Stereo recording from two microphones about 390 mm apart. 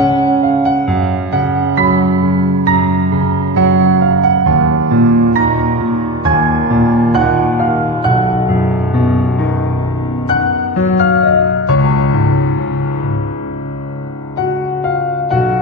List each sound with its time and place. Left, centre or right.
0.0 s music: centre
2.6 s music: right
3.8 s music: right
5.4 s music: centre
8.5 s music: centre
10.8 s music: left